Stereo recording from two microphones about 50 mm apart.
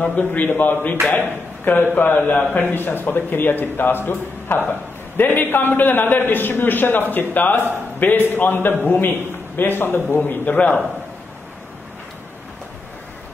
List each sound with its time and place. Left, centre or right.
0.0 s a man's voice: left
9.6 s speech: left
10.1 s a man's voice: left